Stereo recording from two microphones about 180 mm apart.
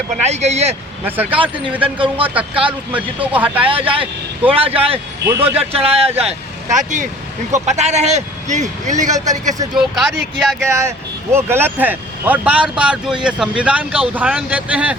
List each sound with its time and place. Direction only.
0.3 s speech: 35° right (ahead or behind)
1.0 s speech: 10° right (ahead or behind)
1.4 s speech: 30° right (ahead or behind)
3.3 s speech: 10° right (ahead or behind)
3.7 s speech: 30° right (ahead or behind)
5.2 s speech: 15° right (ahead or behind)
5.7 s speech: 35° right (ahead or behind)
9.7 s speech: centre (ahead or behind)
10.7 s speech: 15° right (ahead or behind)